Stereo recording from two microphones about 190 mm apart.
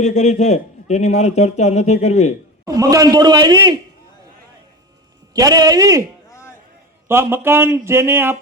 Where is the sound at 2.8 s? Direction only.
20° right (ahead or behind).